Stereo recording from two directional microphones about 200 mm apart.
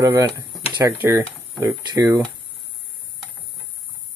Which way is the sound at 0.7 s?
10° right (ahead or behind).